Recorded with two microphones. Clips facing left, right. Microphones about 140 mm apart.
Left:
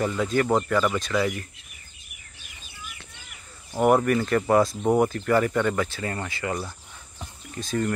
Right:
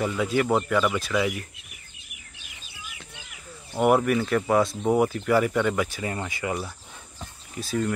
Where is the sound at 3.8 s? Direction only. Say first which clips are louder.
Left 1 dB; 5° right (ahead or behind).